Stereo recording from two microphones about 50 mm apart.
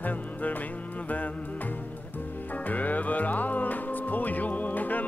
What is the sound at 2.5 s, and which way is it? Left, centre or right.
Speech, left.